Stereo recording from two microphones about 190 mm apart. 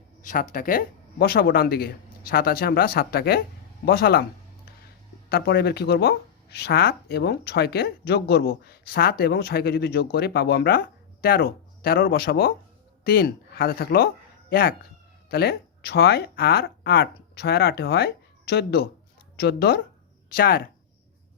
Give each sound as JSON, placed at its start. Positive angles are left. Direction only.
{"t": 0.2, "sound": "a woman's voice", "side_deg": 45}
{"t": 5.3, "sound": "a woman's voice", "side_deg": 55}